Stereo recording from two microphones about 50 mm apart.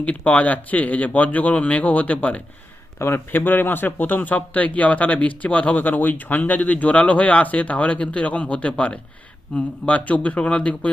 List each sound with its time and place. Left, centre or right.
0.0 s speech: left
3.0 s a man's voice: left